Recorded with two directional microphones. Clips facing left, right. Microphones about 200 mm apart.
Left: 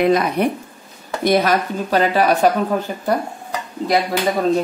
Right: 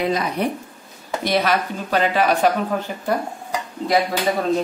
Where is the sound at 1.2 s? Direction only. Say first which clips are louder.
Left 4 dB; 45° left (ahead or behind).